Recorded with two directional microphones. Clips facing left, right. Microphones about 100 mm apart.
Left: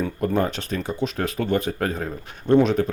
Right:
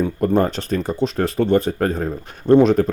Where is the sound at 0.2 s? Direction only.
40° right (ahead or behind).